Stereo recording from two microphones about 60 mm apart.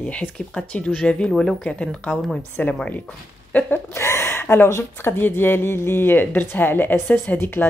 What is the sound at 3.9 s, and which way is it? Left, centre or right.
Speech, left.